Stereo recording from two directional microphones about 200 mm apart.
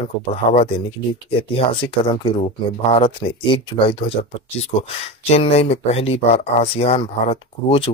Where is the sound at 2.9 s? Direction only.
25° left (ahead or behind).